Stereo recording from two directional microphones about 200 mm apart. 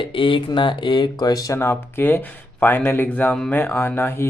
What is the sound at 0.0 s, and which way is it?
Speech, 25° left (ahead or behind).